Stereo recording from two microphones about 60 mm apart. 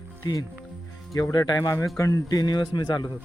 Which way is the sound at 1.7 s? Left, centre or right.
Left.